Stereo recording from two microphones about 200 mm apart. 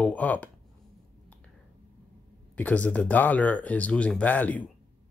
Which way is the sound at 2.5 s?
5° left (ahead or behind).